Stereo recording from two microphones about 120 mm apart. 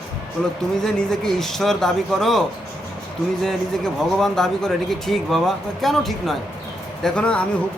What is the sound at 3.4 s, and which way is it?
Speech, centre (ahead or behind).